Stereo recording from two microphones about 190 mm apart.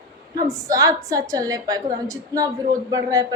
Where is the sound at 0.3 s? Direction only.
15° right (ahead or behind).